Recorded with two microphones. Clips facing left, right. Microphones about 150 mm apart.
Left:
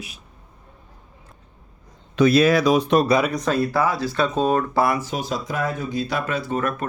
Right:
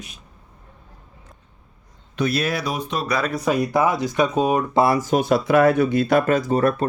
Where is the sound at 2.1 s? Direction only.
90° left.